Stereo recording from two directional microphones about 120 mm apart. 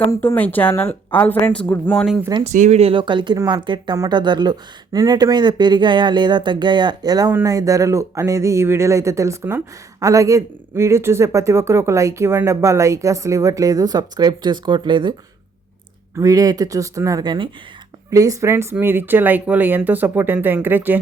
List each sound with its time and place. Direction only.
0.1 s speech: 20° left (ahead or behind)
2.4 s speech: 75° right (ahead or behind)
2.9 s speech: 40° right (ahead or behind)
16.1 s speech: 30° right (ahead or behind)
18.1 s speech: 30° right (ahead or behind)